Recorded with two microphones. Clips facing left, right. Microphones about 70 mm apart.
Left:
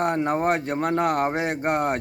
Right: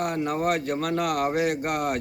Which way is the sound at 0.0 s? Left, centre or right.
Left.